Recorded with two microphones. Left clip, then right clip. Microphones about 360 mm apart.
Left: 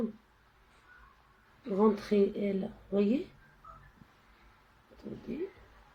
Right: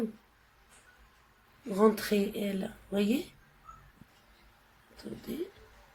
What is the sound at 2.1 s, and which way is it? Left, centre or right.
Speech, right.